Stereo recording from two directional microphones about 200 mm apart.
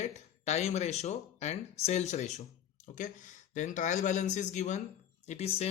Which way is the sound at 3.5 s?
40° left (ahead or behind).